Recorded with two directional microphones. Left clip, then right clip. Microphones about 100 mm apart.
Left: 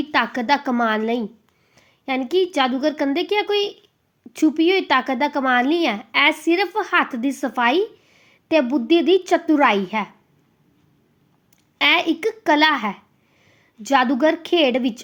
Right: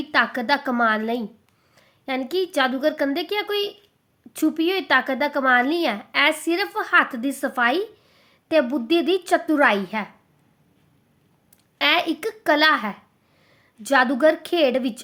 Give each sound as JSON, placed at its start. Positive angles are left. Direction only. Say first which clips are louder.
{"t": 0.0, "sound": "a woman's voice", "louder": "even", "side_deg": 25}
{"t": 11.8, "sound": "a woman's voice", "louder": "left 3 dB", "side_deg": 20}